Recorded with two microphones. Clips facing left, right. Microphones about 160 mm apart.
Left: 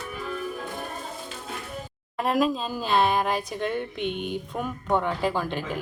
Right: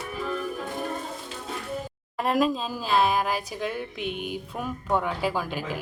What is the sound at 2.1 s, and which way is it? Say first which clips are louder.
A man's voice: even; centre (ahead or behind).